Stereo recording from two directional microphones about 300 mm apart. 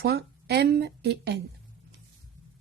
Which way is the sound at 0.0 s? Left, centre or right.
Right.